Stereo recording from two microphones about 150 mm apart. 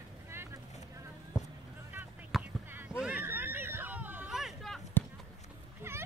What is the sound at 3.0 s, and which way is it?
Hubbub, 10° right (ahead or behind).